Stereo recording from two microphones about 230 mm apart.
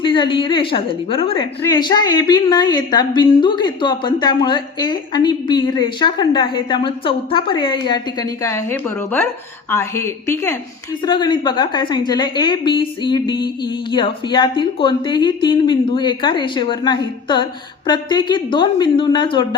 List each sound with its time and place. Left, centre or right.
0.0 s a woman's voice: left